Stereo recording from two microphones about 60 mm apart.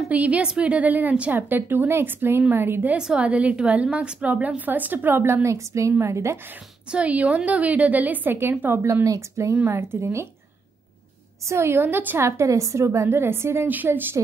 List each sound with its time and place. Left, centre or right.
0.1 s a woman's voice: right
3.2 s a woman's voice: right
6.9 s a woman's voice: right
9.0 s speech: right
11.4 s a woman's voice: right
12.2 s a woman's voice: right